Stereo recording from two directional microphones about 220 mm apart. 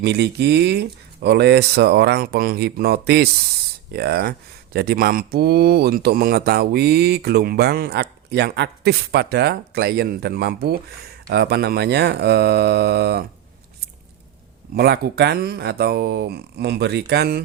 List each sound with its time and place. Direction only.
0.0 s speech: 50° right (ahead or behind)
14.8 s speech: 45° right (ahead or behind)